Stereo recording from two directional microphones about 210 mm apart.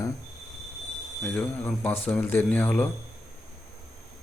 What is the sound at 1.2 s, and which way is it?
Speech, 5° left (ahead or behind).